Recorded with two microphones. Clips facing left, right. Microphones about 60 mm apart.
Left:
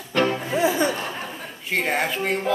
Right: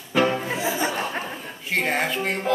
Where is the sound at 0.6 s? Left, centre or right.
Left.